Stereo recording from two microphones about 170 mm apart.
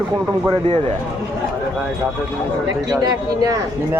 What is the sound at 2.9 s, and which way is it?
Speech, 20° right (ahead or behind).